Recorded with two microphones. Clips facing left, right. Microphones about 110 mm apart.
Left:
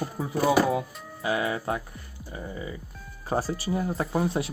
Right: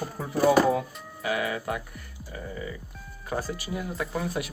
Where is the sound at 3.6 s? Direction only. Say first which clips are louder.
Left 4 dB; 35° left (ahead or behind).